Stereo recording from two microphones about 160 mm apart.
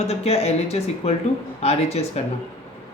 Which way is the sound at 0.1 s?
40° left (ahead or behind).